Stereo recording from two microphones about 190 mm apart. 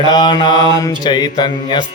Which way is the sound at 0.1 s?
25° left (ahead or behind).